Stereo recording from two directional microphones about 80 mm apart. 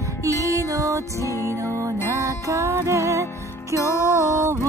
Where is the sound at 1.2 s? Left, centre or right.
Left.